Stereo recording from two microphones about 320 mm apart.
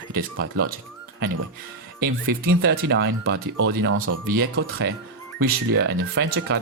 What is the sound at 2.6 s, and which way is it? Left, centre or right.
Speech, right.